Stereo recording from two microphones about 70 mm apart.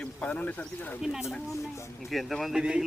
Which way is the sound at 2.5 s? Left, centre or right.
Centre.